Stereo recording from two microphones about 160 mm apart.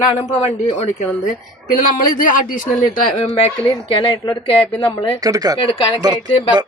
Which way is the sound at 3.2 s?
35° left (ahead or behind).